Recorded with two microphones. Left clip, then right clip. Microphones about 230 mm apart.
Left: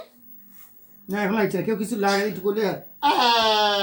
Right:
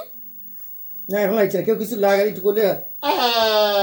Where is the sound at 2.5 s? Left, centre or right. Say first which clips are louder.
Right 6 dB; left.